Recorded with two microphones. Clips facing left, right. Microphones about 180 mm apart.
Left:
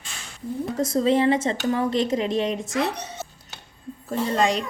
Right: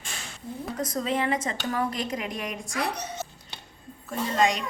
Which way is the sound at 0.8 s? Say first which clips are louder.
Left 8 dB; 30° left (ahead or behind).